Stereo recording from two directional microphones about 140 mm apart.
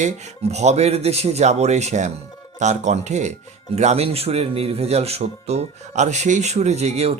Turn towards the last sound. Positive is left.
turn(degrees=-50)  # may be behind; listen again after turning